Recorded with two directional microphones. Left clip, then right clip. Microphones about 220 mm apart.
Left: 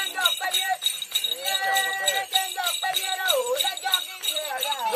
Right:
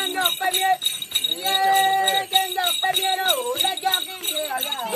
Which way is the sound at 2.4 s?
40° right (ahead or behind).